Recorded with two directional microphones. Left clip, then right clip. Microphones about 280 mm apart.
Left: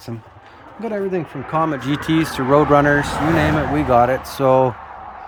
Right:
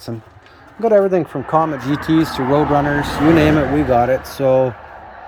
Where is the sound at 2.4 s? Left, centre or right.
Left.